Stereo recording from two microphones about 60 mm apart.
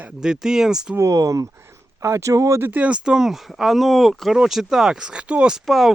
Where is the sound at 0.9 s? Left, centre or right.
Right.